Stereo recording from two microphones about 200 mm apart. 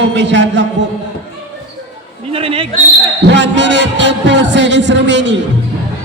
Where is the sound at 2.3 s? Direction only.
25° right (ahead or behind).